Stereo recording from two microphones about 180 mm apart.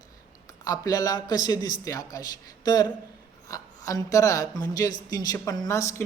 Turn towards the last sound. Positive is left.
turn(degrees=15)  # may be behind; listen again after turning